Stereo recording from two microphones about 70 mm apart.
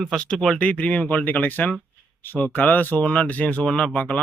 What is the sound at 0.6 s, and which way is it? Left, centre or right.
Speech, centre.